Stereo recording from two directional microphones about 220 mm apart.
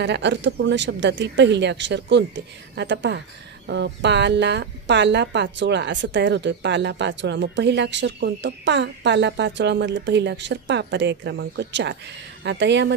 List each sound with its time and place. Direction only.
0.0 s a woman's voice: 50° right (ahead or behind)